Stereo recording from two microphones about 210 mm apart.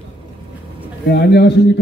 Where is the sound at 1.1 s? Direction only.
50° left (ahead or behind).